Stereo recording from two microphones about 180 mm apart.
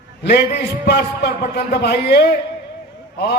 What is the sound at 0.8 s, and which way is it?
Speech, 65° left (ahead or behind).